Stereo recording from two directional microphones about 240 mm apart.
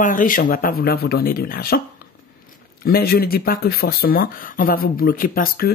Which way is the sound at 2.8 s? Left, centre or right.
Left.